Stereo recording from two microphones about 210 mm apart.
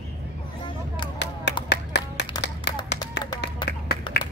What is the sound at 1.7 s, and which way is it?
Clapping, 55° left (ahead or behind).